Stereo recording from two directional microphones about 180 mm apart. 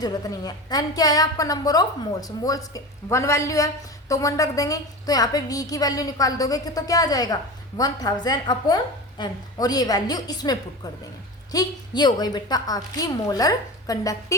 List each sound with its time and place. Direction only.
0.0 s a woman's voice: 20° left (ahead or behind)